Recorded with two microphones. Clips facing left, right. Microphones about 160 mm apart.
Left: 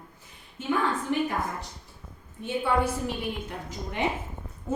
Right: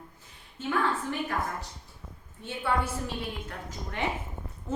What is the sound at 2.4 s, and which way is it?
A woman's voice, 15° left (ahead or behind).